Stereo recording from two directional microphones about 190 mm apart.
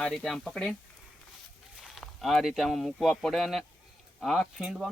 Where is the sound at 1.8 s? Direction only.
Centre (ahead or behind).